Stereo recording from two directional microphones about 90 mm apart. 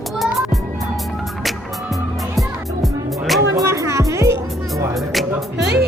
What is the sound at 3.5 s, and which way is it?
Music, 35° right (ahead or behind).